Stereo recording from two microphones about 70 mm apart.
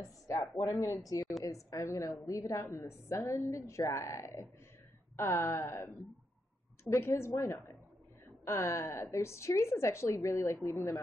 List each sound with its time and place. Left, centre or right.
0.3 s a woman's voice: left